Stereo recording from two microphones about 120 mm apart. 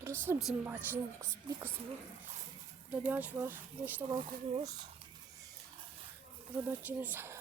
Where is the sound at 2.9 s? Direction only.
15° right (ahead or behind).